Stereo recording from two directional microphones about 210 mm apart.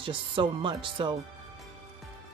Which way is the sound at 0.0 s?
25° right (ahead or behind).